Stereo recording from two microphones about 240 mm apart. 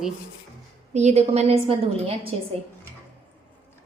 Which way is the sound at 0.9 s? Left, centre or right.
Right.